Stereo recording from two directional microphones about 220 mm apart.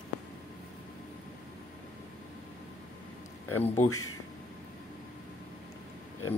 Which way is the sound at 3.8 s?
80° left.